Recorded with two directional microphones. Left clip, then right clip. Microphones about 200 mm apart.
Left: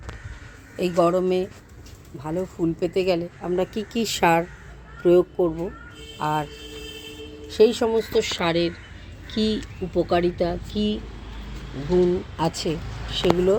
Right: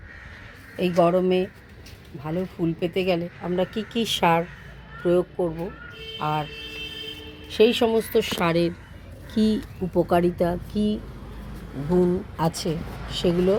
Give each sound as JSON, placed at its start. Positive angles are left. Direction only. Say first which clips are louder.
{"t": 0.8, "sound": "speech", "louder": "even", "side_deg": -5}
{"t": 6.1, "sound": "speech", "louder": "left 2 dB", "side_deg": 5}
{"t": 12.4, "sound": "speech", "louder": "left 1 dB", "side_deg": 0}